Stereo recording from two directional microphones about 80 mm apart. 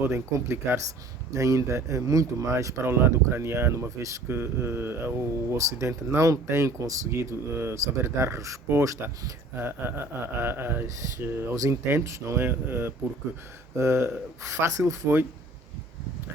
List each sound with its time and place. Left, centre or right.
0.0 s speech: right
9.6 s speech: right